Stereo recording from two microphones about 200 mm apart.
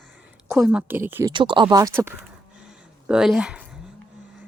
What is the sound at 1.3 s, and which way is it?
Speech, 25° right (ahead or behind).